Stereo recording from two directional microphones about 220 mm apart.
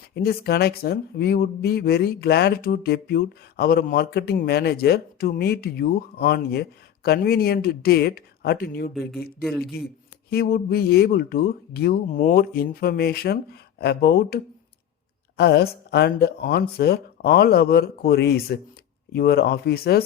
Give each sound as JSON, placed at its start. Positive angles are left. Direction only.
{"t": 0.1, "sound": "speech", "side_deg": 45}
{"t": 9.4, "sound": "speech", "side_deg": 0}
{"t": 10.2, "sound": "speech", "side_deg": 45}
{"t": 15.4, "sound": "speech", "side_deg": 50}